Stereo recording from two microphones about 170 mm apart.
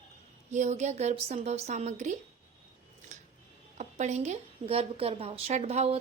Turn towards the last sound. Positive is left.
turn(degrees=-40)  # may be behind; listen again after turning